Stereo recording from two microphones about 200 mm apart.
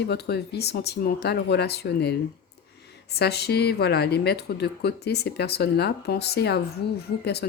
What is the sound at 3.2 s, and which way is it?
Speech, 55° left (ahead or behind).